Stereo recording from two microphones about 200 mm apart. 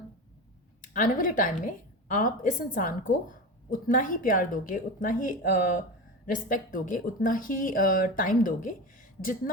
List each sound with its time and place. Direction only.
0.8 s a woman's voice: 40° left (ahead or behind)